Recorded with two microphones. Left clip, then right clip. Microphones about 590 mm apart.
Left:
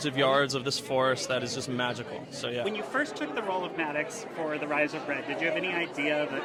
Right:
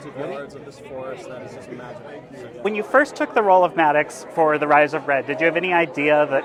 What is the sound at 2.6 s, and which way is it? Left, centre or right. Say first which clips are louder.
Speech: right 17 dB; right.